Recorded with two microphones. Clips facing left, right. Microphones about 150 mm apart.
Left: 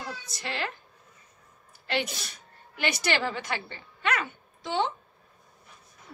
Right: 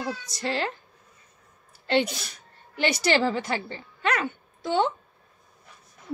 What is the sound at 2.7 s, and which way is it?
A woman's voice, 35° right (ahead or behind).